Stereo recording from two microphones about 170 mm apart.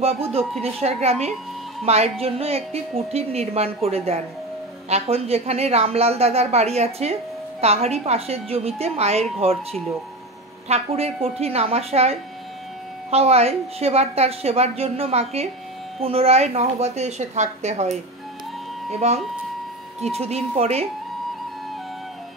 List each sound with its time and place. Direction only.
0.0 s a woman's voice: 35° right (ahead or behind)
10.7 s a woman's voice: 35° right (ahead or behind)